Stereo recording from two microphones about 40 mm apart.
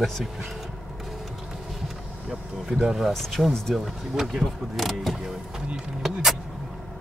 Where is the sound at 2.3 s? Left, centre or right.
Centre.